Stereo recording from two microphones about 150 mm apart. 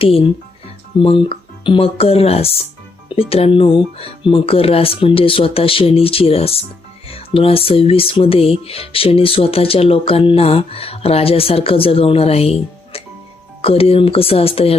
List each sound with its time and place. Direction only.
0.9 s speech: 35° left (ahead or behind)